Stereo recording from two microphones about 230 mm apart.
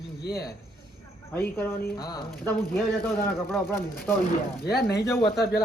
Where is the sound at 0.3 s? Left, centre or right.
Left.